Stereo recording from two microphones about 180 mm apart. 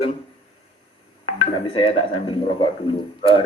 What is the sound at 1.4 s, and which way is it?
Speech, 30° left (ahead or behind).